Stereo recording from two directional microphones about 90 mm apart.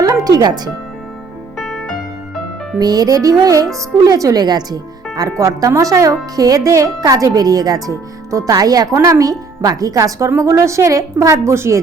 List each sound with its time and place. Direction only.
0.0 s music: 40° right (ahead or behind)
1.5 s music: centre (ahead or behind)
2.7 s speech: 45° right (ahead or behind)
5.4 s speech: 35° right (ahead or behind)